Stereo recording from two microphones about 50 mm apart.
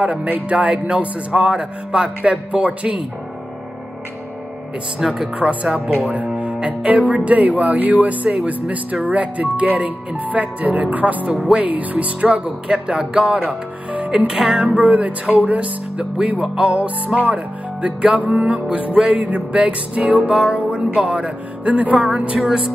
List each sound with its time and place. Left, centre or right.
0.0 s speech: centre
5.0 s speech: centre
5.3 s speech: right
12.4 s speech: centre
13.9 s music: right
14.5 s speech: right
16.0 s speech: centre
22.4 s speech: centre